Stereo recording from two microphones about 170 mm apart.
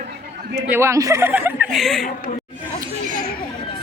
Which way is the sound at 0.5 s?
15° right (ahead or behind).